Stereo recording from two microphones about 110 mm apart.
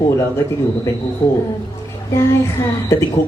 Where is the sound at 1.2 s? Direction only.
35° left (ahead or behind).